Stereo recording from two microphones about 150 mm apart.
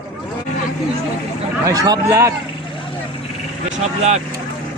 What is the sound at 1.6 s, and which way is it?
Speech, 25° right (ahead or behind).